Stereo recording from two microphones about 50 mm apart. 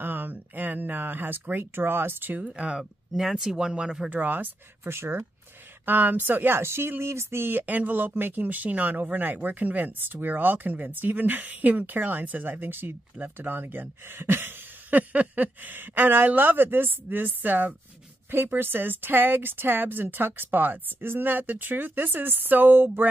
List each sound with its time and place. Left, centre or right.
0.0 s speech: right
2.4 s speech: right
2.8 s speech: centre
4.1 s speech: right
4.8 s speech: right
5.9 s speech: right
6.6 s speech: right
7.6 s speech: right
14.9 s speech: right
18.3 s speech: right